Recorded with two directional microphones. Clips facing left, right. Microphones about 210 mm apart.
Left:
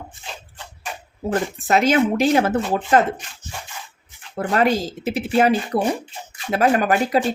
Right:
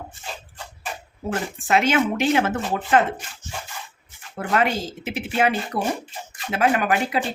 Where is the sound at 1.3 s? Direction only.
35° left (ahead or behind).